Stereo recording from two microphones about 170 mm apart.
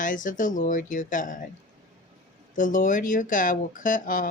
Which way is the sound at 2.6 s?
50° left (ahead or behind).